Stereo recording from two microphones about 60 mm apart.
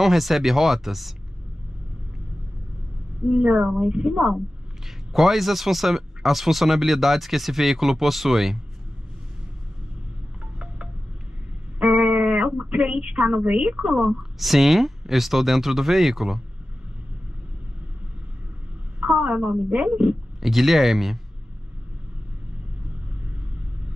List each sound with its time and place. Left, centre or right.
0.0 s speech: centre
3.3 s a woman's voice: centre
4.8 s speech: centre
11.8 s speech: right
14.0 s speech: centre
18.9 s a woman's voice: centre
20.3 s speech: centre